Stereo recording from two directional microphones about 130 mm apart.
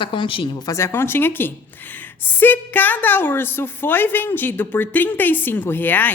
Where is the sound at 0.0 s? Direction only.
40° left (ahead or behind).